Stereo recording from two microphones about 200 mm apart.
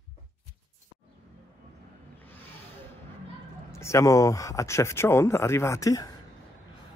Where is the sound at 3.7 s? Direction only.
15° left (ahead or behind).